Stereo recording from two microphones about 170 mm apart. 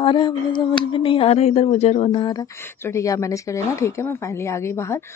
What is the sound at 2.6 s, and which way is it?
A woman's voice, 15° left (ahead or behind).